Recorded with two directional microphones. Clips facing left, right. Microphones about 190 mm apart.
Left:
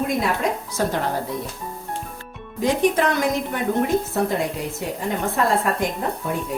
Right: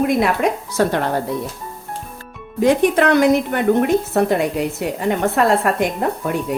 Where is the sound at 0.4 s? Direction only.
70° right (ahead or behind).